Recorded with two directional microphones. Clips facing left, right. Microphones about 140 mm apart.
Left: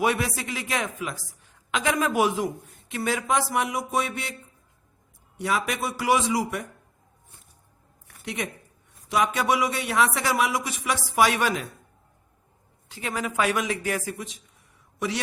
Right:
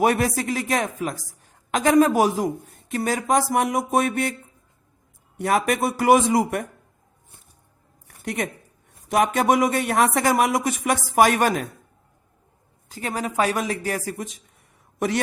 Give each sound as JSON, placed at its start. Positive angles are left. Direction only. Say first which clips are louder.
{"t": 0.0, "sound": "speech", "louder": "right 5 dB", "side_deg": -45}
{"t": 5.4, "sound": "speech", "louder": "right 6 dB", "side_deg": -50}
{"t": 8.0, "sound": "a sound", "louder": "right 5 dB", "side_deg": -50}
{"t": 9.0, "sound": "speech", "louder": "right 4 dB", "side_deg": -50}
{"t": 12.9, "sound": "speech", "louder": "right 3 dB", "side_deg": -40}